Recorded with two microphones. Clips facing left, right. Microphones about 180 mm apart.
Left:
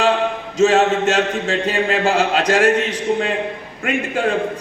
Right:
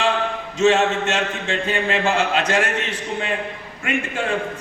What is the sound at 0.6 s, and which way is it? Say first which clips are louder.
A man's voice: left 3 dB; 40° left (ahead or behind).